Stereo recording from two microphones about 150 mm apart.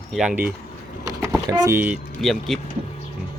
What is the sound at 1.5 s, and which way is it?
Speech, 25° right (ahead or behind).